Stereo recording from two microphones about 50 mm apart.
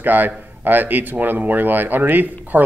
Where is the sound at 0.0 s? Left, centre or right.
Right.